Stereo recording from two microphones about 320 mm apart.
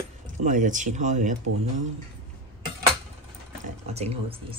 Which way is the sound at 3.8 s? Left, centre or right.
Centre.